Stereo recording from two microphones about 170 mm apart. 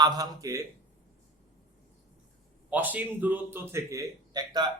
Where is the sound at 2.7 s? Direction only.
10° right (ahead or behind).